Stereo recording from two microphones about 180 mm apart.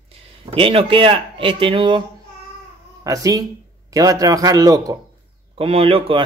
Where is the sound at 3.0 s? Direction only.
20° right (ahead or behind).